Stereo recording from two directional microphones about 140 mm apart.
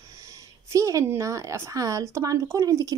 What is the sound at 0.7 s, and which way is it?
A woman's voice, 25° right (ahead or behind).